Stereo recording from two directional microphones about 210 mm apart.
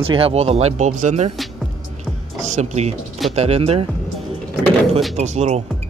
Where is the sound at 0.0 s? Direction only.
25° right (ahead or behind).